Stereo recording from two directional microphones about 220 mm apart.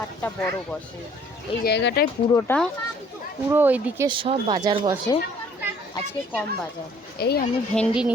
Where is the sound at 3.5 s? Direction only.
10° right (ahead or behind).